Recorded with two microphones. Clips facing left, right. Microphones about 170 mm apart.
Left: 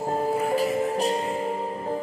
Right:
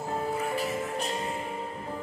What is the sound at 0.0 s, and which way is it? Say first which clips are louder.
Music: left 6 dB; 35° left (ahead or behind).